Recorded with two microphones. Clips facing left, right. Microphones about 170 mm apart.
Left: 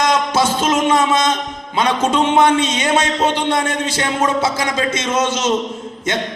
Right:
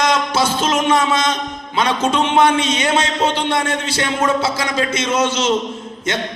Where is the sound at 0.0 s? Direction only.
20° left (ahead or behind).